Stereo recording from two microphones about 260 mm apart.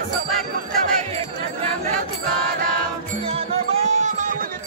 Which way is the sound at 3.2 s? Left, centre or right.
Right.